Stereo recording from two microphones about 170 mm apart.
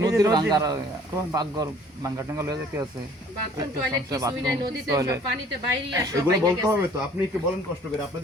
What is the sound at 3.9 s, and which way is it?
A man's voice, 20° right (ahead or behind).